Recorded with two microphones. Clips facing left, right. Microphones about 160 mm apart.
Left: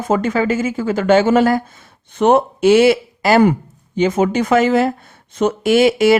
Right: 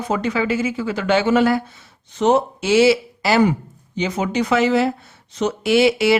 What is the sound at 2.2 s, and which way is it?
Speech, 55° left (ahead or behind).